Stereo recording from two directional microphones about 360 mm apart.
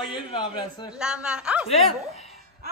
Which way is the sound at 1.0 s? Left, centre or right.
Centre.